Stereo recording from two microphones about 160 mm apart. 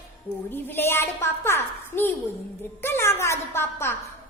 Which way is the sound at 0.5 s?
15° left (ahead or behind).